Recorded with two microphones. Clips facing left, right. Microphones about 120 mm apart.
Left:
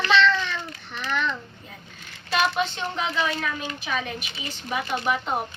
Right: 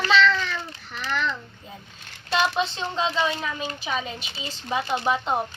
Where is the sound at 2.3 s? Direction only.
20° right (ahead or behind).